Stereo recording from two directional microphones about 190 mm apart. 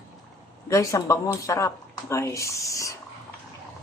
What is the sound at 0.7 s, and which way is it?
Speech, 15° left (ahead or behind).